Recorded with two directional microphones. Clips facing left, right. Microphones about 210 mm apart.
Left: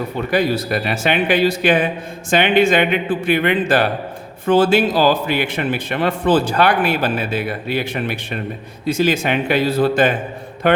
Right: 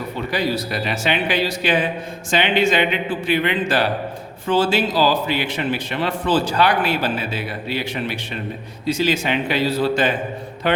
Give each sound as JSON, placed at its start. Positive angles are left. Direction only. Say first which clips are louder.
{"t": 0.3, "sound": "speech", "louder": "left 5 dB", "side_deg": 50}